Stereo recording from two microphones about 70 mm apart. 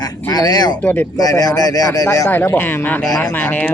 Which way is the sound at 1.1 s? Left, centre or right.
Left.